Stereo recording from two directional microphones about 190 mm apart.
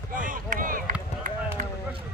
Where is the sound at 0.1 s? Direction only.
45° right (ahead or behind).